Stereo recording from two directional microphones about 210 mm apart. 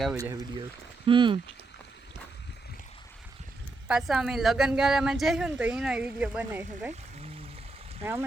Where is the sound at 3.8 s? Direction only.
Centre (ahead or behind).